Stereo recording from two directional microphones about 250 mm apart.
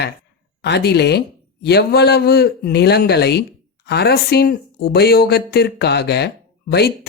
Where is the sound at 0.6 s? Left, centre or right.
Left.